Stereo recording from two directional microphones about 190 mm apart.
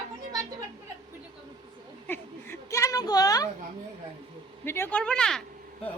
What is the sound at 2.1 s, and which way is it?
A woman's voice, 10° left (ahead or behind).